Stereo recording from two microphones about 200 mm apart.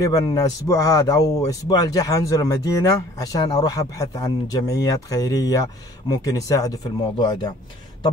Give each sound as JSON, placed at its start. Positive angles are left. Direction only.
{"t": 0.0, "sound": "speech", "side_deg": 20}